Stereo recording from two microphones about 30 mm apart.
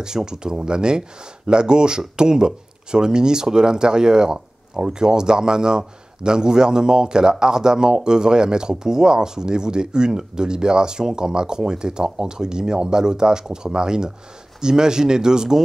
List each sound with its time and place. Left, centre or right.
0.0 s speech: right